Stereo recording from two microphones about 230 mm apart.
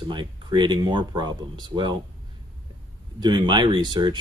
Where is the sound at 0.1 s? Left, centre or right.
Centre.